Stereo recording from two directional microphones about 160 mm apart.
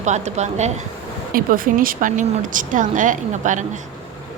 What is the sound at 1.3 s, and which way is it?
Speech, 60° right (ahead or behind).